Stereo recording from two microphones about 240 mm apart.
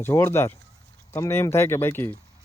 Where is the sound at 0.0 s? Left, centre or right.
Centre.